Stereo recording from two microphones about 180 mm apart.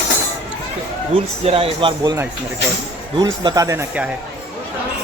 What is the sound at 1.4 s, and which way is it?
Speech, 30° right (ahead or behind).